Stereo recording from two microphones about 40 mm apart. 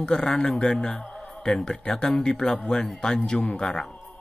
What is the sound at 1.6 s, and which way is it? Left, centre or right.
A man's voice, centre.